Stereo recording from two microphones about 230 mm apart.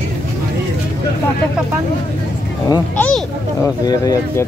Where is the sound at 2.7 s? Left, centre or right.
Centre.